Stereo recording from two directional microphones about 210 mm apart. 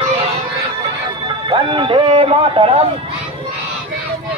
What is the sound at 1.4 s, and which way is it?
A man's voice, 25° right (ahead or behind).